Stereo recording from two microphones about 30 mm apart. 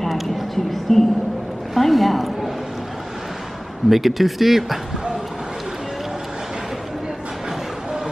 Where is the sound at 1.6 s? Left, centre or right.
Centre.